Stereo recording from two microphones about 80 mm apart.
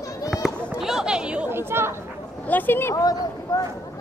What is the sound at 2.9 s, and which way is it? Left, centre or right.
Speech, left.